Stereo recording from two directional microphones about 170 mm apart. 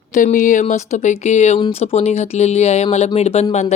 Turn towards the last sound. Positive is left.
turn(degrees=40)  # may be behind; listen again after turning